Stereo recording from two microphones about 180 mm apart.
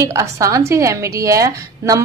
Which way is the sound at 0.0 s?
15° right (ahead or behind).